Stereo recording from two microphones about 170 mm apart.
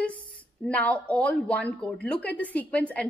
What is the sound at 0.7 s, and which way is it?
A woman's voice, 10° left (ahead or behind).